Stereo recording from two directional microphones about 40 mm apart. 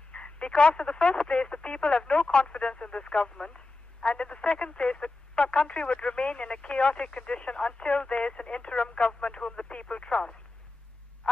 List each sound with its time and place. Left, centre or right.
0.1 s speech: left